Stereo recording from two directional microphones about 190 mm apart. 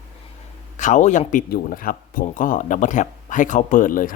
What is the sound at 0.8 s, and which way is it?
Speech, 40° left (ahead or behind).